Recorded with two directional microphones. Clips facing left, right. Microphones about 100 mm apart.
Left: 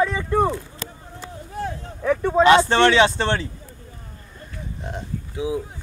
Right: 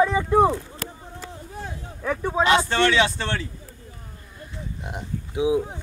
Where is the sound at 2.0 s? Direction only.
5° right (ahead or behind).